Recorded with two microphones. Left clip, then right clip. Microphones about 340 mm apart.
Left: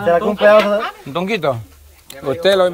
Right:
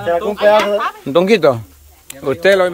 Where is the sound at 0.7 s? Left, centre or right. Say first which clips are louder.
Right 6 dB; centre.